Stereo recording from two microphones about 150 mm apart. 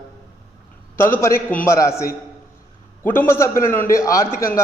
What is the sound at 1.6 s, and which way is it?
A man's voice, 20° left (ahead or behind).